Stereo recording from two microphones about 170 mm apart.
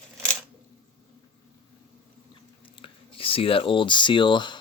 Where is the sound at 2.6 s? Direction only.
30° left (ahead or behind).